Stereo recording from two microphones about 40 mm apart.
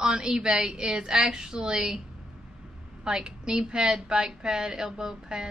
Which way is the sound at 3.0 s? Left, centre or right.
Centre.